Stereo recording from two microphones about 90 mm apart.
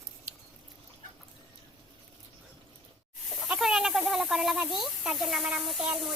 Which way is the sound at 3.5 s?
5° right (ahead or behind).